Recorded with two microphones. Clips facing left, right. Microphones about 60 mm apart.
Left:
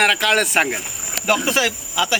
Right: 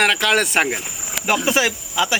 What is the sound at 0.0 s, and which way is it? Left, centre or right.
Speech, centre.